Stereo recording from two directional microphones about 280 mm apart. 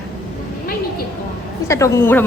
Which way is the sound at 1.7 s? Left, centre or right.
Centre.